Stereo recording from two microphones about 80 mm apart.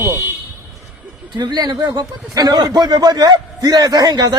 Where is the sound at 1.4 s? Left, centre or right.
Right.